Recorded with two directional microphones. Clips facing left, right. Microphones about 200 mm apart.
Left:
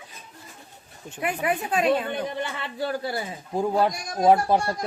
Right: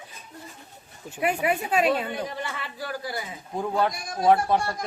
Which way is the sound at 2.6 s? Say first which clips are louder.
Left 5 dB; 25° left (ahead or behind).